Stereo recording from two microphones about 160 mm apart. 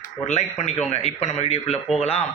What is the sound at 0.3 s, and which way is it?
A man's voice, 45° left (ahead or behind).